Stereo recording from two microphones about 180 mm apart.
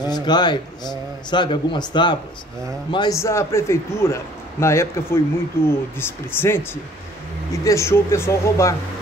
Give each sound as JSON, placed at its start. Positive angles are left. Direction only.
{"t": 0.0, "sound": "a man's voice", "side_deg": 25}